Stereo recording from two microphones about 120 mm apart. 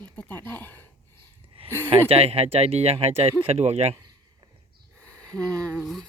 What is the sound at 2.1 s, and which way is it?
Speech, 55° right (ahead or behind).